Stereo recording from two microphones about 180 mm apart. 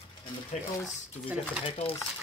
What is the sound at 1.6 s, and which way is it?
Speech, 30° left (ahead or behind).